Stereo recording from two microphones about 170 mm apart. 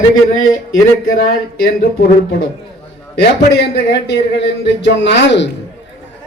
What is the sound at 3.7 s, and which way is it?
A man's voice, 85° left.